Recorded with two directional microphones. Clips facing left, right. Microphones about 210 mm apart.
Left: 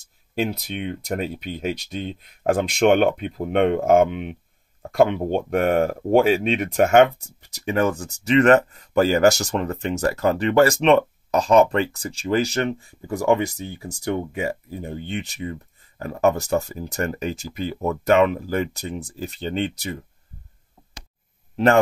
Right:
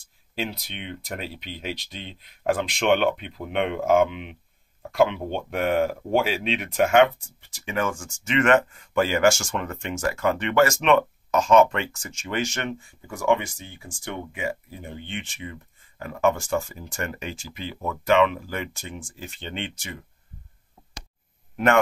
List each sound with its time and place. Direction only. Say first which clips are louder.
0.0 s speech: left 6 dB; 45° left (ahead or behind)